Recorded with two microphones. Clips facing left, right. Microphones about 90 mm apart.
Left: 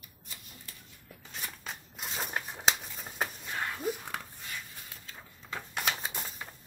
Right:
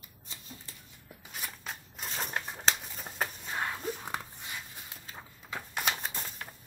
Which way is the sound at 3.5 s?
20° right (ahead or behind).